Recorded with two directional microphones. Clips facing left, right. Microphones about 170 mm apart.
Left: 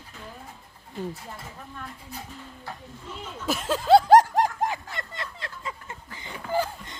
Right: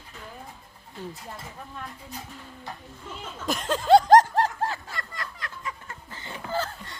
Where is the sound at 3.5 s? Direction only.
5° left (ahead or behind).